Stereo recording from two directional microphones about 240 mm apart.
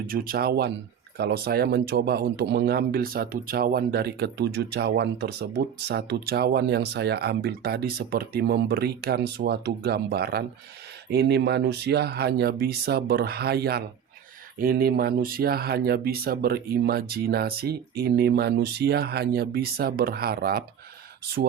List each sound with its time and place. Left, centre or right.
0.1 s speech: right